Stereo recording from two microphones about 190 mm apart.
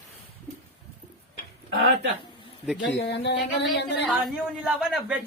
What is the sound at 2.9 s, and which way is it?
Speech, 65° left (ahead or behind).